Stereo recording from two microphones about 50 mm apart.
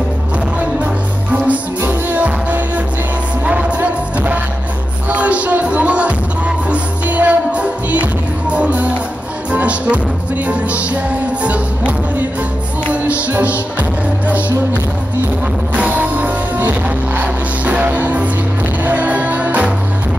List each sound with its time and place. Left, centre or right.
1.9 s music: right
15.7 s music: right